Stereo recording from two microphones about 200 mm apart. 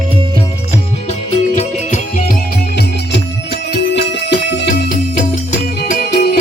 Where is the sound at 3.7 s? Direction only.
60° left (ahead or behind).